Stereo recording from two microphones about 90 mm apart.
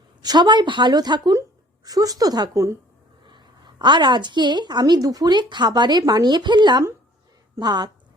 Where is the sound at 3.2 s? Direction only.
60° right (ahead or behind).